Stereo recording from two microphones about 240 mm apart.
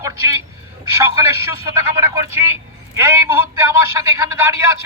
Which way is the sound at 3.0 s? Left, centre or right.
Centre.